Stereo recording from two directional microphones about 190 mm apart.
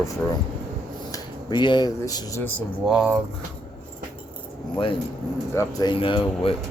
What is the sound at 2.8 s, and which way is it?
Speech, 5° right (ahead or behind).